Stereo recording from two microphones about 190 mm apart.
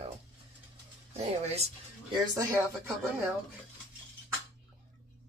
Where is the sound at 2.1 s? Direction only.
20° right (ahead or behind).